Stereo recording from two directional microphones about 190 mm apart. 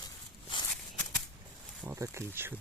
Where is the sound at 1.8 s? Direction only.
15° right (ahead or behind).